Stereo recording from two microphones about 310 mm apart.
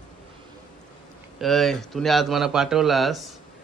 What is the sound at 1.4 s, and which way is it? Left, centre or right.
A man's voice, centre.